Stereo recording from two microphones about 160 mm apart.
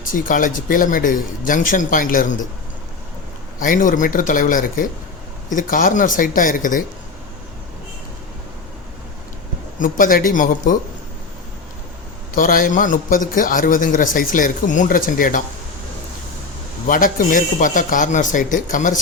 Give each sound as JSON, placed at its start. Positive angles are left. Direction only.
{"t": 0.0, "sound": "a man's voice", "side_deg": 55}
{"t": 3.6, "sound": "a man's voice", "side_deg": 55}
{"t": 9.8, "sound": "a man's voice", "side_deg": 60}
{"t": 12.3, "sound": "a man's voice", "side_deg": 60}
{"t": 16.8, "sound": "a man's voice", "side_deg": 60}